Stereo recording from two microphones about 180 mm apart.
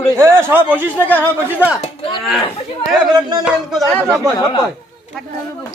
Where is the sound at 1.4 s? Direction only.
10° right (ahead or behind).